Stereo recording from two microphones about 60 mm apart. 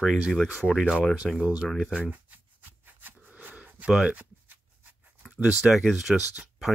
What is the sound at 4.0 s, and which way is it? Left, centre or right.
Speech, right.